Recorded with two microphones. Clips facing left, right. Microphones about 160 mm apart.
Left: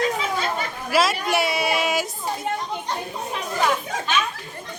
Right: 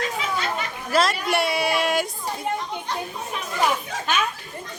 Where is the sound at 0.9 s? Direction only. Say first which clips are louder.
Left 1 dB; 5° left (ahead or behind).